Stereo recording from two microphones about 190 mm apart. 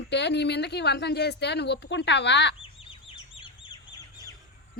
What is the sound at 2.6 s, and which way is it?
Bird, 25° left (ahead or behind).